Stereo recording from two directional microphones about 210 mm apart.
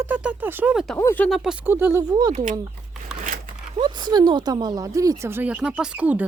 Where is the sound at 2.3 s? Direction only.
35° right (ahead or behind).